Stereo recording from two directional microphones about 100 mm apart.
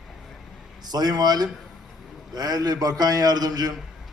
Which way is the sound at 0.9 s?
40° right (ahead or behind).